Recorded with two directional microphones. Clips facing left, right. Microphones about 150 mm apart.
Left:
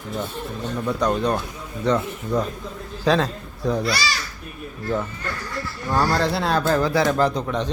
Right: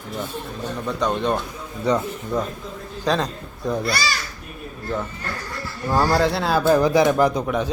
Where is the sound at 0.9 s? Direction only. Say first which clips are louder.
Left 1 dB; 5° left (ahead or behind).